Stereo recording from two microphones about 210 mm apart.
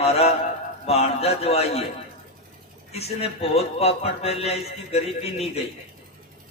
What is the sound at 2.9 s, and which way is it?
A man's voice, 30° left (ahead or behind).